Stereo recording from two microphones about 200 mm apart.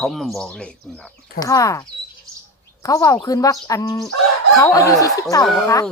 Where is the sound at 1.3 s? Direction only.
15° left (ahead or behind).